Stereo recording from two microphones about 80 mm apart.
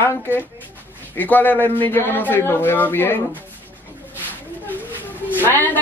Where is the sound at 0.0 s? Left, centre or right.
Left.